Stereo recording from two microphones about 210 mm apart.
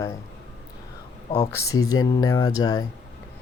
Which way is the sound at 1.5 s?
15° left (ahead or behind).